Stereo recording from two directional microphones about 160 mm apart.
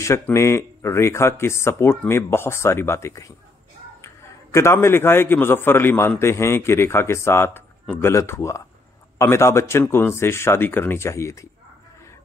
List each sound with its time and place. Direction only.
0.0 s a man's voice: 20° left (ahead or behind)